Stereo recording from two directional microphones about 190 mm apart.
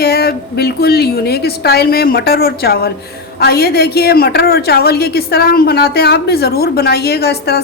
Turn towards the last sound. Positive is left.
turn(degrees=55)  # may be behind; listen again after turning